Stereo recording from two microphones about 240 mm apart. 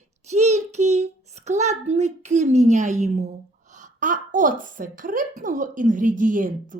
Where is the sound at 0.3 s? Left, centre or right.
Right.